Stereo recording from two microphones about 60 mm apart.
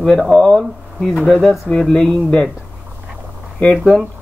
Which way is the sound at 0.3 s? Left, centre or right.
Centre.